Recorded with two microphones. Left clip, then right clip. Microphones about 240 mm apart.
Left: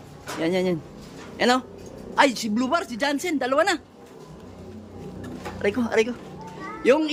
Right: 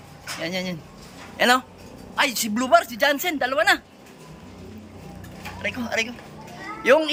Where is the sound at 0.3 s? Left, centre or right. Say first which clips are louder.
Left 5 dB; centre.